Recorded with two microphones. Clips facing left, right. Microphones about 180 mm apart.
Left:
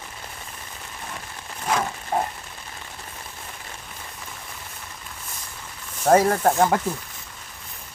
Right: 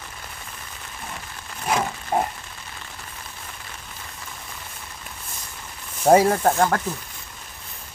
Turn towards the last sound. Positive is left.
turn(degrees=5)  # may be behind; listen again after turning